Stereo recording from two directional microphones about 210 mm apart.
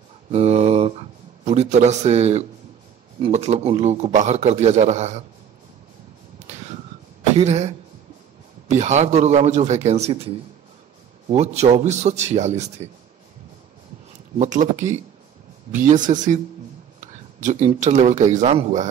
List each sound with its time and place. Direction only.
0.3 s a sound: 30° right (ahead or behind)
3.2 s a man's voice: 30° right (ahead or behind)
7.3 s a man's voice: 30° right (ahead or behind)
14.4 s a man's voice: 35° right (ahead or behind)
17.4 s a man's voice: 35° right (ahead or behind)